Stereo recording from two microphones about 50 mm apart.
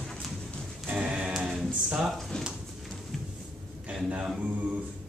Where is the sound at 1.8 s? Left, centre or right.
Centre.